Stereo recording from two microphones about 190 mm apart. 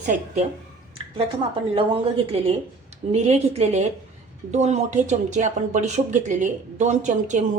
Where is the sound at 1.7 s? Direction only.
30° right (ahead or behind).